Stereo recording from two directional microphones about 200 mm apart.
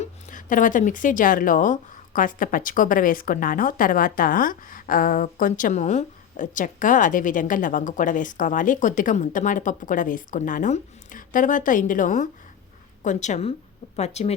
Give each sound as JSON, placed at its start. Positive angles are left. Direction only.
{"t": 0.0, "sound": "speech", "side_deg": 40}